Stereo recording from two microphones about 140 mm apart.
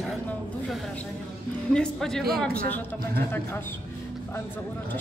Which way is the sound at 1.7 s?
5° left (ahead or behind).